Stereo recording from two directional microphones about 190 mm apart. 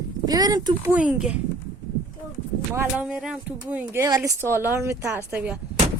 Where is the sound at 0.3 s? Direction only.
20° right (ahead or behind).